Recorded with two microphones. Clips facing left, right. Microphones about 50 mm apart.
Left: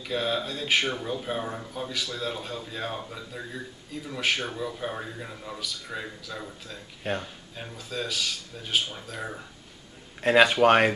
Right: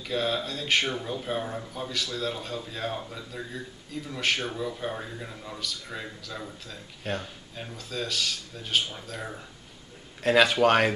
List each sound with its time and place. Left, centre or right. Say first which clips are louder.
0.0 s speech: even; centre
7.0 s speech: left 2 dB; centre
10.2 s speech: left 2 dB; centre